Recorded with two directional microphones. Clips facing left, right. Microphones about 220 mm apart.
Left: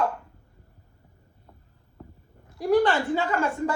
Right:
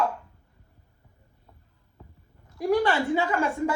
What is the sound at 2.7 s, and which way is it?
Speech, 10° right (ahead or behind).